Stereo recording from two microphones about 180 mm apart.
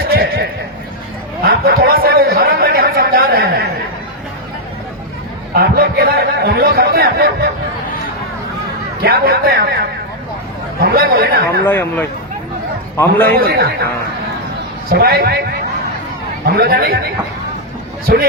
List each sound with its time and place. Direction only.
0.1 s a sound: 60° right (ahead or behind)
1.5 s a sound: 55° right (ahead or behind)
5.5 s a sound: 55° right (ahead or behind)
9.0 s a man's voice: 60° right (ahead or behind)
10.8 s speech: 55° right (ahead or behind)
11.6 s speech: 10° left (ahead or behind)
13.3 s a man's voice: 60° right (ahead or behind)
14.8 s a man's voice: 60° right (ahead or behind)
16.5 s a man's voice: 60° right (ahead or behind)
18.0 s speech: 55° right (ahead or behind)